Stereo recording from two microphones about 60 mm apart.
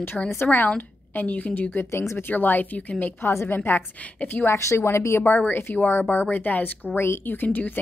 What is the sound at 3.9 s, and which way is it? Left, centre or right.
Speech, left.